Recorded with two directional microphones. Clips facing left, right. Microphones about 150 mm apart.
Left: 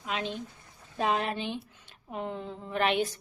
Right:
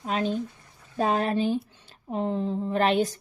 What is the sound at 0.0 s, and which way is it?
A woman's voice, 40° right (ahead or behind).